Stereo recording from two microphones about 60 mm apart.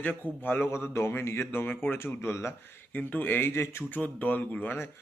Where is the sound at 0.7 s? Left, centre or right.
Left.